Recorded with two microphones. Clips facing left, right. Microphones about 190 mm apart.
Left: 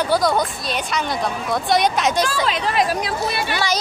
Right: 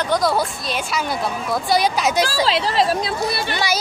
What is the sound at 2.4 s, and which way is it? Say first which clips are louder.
Speech: right 2 dB; 30° right (ahead or behind).